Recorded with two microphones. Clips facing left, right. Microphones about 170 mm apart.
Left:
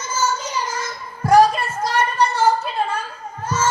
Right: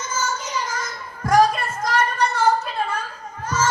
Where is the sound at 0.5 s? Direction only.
30° left (ahead or behind).